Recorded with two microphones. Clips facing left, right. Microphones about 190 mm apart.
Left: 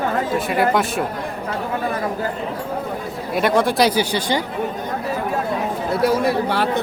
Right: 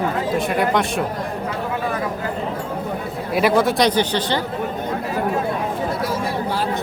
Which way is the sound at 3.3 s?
Centre (ahead or behind).